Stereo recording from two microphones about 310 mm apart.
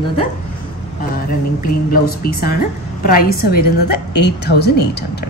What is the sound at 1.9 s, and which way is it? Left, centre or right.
A woman's voice, left.